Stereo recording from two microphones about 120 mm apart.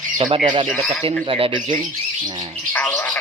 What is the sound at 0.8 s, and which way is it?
Speech, centre (ahead or behind).